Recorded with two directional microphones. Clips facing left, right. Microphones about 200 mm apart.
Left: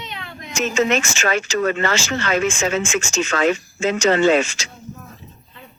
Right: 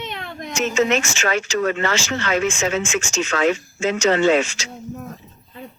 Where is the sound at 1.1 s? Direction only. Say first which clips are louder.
Left 1 dB; 45° left (ahead or behind).